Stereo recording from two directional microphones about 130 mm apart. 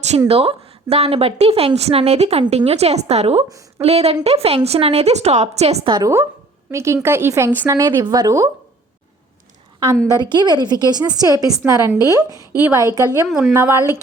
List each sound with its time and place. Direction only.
0.3 s a woman's voice: 50° right (ahead or behind)
5.8 s speech: 40° right (ahead or behind)
6.7 s a woman's voice: 20° right (ahead or behind)
10.2 s a woman's voice: 35° right (ahead or behind)
13.2 s speech: centre (ahead or behind)
13.5 s a woman's voice: 20° right (ahead or behind)